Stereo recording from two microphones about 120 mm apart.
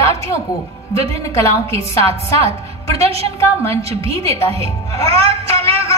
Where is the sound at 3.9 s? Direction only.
55° right (ahead or behind).